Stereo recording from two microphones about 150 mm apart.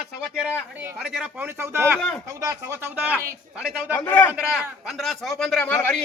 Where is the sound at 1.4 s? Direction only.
15° right (ahead or behind).